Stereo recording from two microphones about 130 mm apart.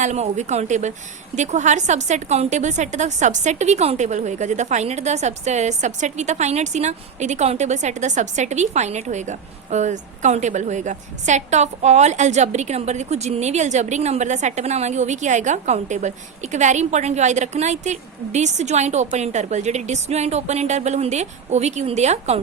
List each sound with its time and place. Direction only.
0.0 s a woman's voice: 65° right (ahead or behind)